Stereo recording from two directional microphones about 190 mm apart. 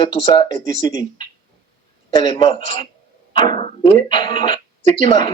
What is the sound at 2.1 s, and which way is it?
Speech, 25° left (ahead or behind).